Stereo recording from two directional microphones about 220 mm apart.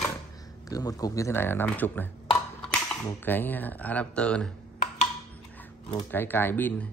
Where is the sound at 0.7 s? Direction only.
15° left (ahead or behind).